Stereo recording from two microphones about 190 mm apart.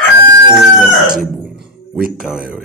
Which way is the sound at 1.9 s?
5° right (ahead or behind).